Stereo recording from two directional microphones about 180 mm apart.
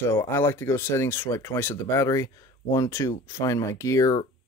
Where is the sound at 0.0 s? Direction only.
15° left (ahead or behind).